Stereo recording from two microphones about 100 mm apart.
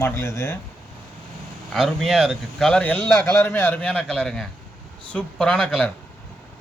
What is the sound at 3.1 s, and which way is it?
A man's voice, 20° left (ahead or behind).